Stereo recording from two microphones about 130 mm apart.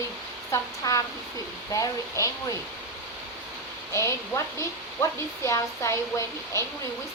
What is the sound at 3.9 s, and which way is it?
A woman's voice, 25° left (ahead or behind).